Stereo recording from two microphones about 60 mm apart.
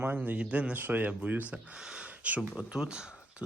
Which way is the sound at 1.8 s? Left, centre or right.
Centre.